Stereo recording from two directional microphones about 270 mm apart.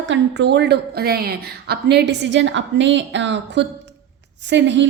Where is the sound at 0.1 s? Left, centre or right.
Right.